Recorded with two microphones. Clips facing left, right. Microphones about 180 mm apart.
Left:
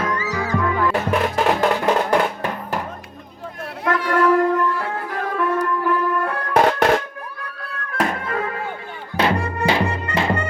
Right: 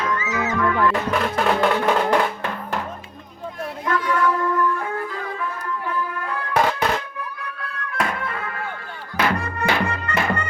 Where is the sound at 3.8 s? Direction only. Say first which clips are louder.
Left 3 dB; 75° left (ahead or behind).